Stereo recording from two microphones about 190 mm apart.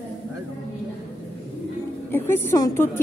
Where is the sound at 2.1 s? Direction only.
10° left (ahead or behind).